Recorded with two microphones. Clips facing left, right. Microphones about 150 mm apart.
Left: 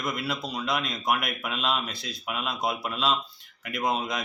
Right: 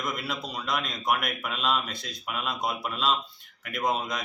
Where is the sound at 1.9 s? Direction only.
50° right (ahead or behind).